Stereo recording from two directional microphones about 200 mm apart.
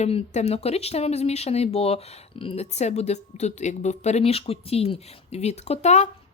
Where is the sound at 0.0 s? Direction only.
30° left (ahead or behind).